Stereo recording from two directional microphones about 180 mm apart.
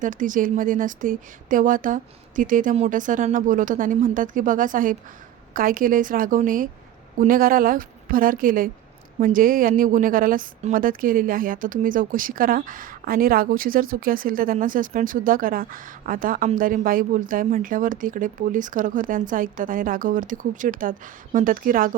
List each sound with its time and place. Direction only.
0.0 s a woman's voice: 45° right (ahead or behind)